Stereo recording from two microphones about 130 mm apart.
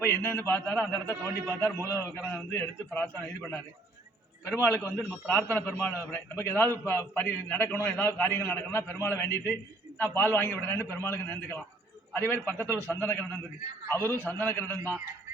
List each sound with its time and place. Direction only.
0.0 s a man's voice: 15° left (ahead or behind)